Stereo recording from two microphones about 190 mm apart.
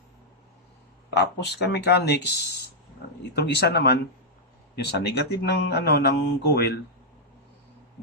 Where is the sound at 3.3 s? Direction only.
60° left (ahead or behind).